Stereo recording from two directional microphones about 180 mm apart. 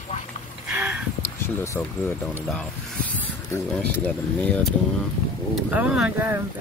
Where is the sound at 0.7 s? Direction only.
5° right (ahead or behind).